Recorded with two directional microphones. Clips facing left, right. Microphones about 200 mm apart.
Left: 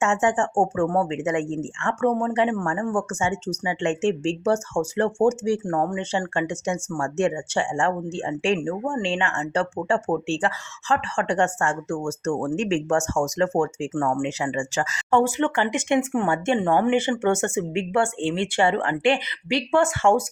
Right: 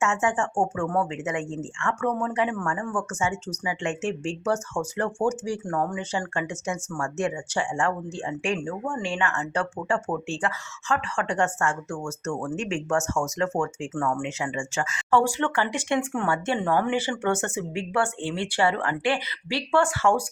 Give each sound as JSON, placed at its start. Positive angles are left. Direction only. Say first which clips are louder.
{"t": 0.0, "sound": "speech", "louder": "left 3 dB", "side_deg": 35}
{"t": 15.1, "sound": "speech", "louder": "left 2 dB", "side_deg": 20}